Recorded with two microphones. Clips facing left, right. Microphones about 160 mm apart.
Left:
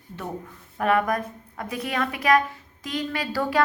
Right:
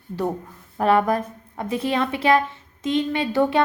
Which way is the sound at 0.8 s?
30° right (ahead or behind).